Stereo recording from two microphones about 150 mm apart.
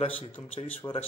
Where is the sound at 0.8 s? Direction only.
20° left (ahead or behind).